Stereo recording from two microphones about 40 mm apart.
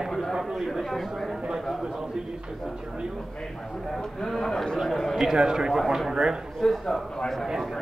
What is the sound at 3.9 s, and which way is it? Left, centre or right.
Speech, centre.